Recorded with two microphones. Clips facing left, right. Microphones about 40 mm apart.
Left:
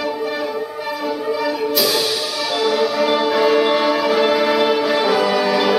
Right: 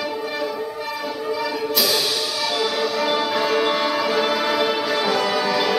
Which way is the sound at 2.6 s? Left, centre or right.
Centre.